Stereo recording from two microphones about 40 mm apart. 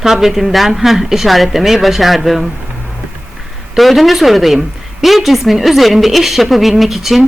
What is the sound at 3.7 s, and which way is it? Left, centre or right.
A man's voice, centre.